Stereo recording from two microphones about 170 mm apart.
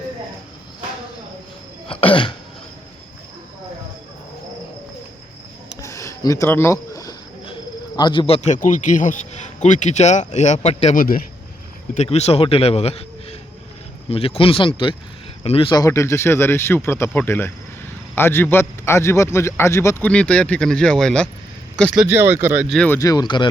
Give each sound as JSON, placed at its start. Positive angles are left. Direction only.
{"t": 1.9, "sound": "throat clearing", "side_deg": 30}
{"t": 5.8, "sound": "a sound", "side_deg": 15}
{"t": 7.4, "sound": "cricket", "side_deg": 30}
{"t": 8.4, "sound": "a man's voice", "side_deg": 45}
{"t": 22.0, "sound": "speech", "side_deg": -10}
{"t": 22.7, "sound": "speech", "side_deg": 5}
{"t": 23.0, "sound": "speech", "side_deg": 20}